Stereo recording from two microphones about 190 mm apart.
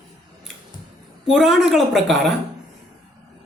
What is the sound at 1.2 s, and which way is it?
Speech, centre (ahead or behind).